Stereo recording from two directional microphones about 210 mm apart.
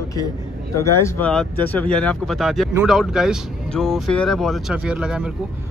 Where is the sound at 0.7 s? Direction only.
10° left (ahead or behind).